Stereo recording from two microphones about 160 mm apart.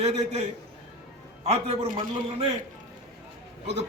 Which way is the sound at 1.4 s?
40° right (ahead or behind).